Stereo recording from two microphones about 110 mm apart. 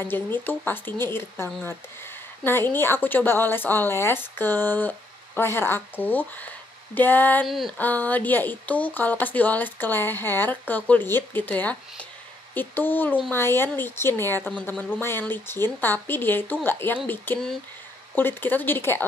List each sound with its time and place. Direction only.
0.0 s speech: 20° left (ahead or behind)
7.4 s a sound: centre (ahead or behind)
7.7 s speech: 15° left (ahead or behind)